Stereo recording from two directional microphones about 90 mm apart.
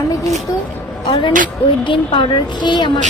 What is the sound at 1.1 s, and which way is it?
A woman's voice, 70° left (ahead or behind).